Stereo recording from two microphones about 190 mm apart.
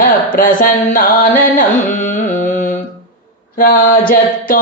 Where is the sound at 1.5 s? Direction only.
40° left (ahead or behind).